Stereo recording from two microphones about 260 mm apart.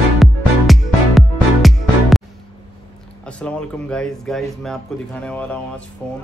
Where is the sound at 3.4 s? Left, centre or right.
Centre.